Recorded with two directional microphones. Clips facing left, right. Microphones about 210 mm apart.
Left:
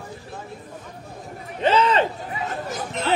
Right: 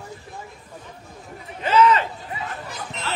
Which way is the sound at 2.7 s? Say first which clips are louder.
Left 11 dB; 45° left (ahead or behind).